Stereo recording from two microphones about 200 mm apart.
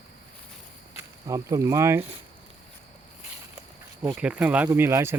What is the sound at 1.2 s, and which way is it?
Speech, 15° right (ahead or behind).